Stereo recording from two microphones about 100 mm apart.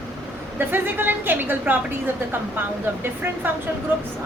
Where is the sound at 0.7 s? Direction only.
20° right (ahead or behind).